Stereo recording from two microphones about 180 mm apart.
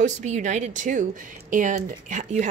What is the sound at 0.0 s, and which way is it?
A woman's voice, 40° right (ahead or behind).